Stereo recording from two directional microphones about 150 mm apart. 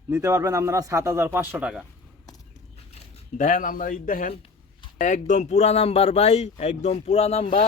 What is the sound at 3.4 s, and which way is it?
Speech, 60° left (ahead or behind).